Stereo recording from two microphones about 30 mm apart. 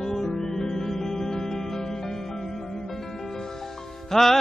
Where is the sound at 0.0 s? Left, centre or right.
Centre.